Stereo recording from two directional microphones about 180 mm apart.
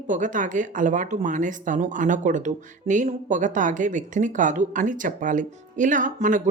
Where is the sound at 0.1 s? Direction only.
45° right (ahead or behind).